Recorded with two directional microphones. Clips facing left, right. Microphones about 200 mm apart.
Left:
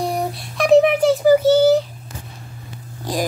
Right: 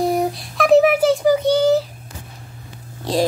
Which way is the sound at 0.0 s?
Centre (ahead or behind).